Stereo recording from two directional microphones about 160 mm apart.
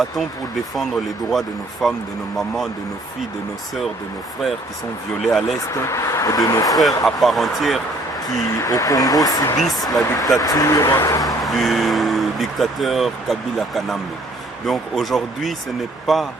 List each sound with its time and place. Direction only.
1.3 s speech: centre (ahead or behind)
5.3 s speech: centre (ahead or behind)
5.7 s speech: 20° left (ahead or behind)
6.7 s speech: centre (ahead or behind)
8.6 s speech: 20° left (ahead or behind)
9.6 s speech: centre (ahead or behind)
10.2 s speech: 20° left (ahead or behind)
11.4 s speech: centre (ahead or behind)